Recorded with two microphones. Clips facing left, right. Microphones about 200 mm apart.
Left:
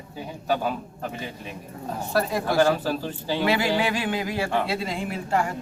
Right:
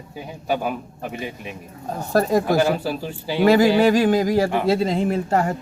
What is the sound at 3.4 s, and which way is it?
A woman's voice, 40° right (ahead or behind).